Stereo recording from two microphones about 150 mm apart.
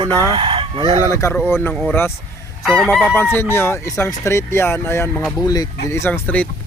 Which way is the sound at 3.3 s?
15° left (ahead or behind).